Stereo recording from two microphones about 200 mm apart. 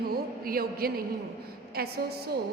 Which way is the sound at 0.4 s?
50° right (ahead or behind).